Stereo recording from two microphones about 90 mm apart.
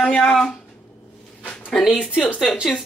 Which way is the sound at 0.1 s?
5° left (ahead or behind).